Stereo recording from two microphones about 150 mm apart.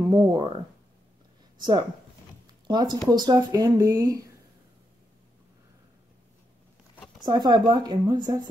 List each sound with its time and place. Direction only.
0.1 s speech: 25° right (ahead or behind)
1.6 s speech: 30° right (ahead or behind)
7.2 s speech: 30° right (ahead or behind)